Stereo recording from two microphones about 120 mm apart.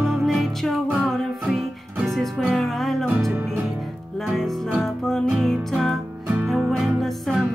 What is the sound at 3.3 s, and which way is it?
Music, 15° right (ahead or behind).